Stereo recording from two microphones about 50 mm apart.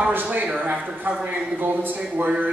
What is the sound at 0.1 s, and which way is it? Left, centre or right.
Speech, right.